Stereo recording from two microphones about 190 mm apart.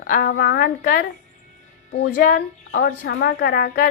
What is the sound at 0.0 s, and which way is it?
A woman's voice, 50° left (ahead or behind).